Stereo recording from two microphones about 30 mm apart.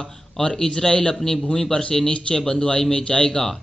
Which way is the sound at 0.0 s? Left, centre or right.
Left.